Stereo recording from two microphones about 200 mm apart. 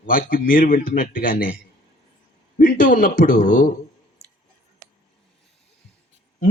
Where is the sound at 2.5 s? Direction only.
45° left (ahead or behind).